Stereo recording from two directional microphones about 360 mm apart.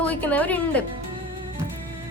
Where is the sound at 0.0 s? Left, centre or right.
Centre.